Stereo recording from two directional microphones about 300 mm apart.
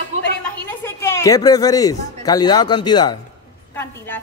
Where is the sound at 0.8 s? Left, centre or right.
Centre.